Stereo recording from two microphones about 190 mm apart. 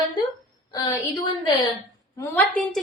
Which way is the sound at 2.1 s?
10° left (ahead or behind).